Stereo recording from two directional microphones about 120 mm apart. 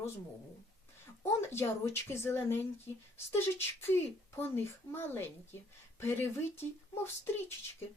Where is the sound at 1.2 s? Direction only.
20° left (ahead or behind).